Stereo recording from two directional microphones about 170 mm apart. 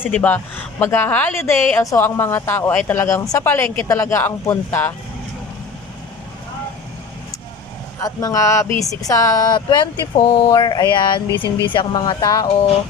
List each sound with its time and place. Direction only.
0.0 s speech: 10° left (ahead or behind)
8.0 s speech: 20° left (ahead or behind)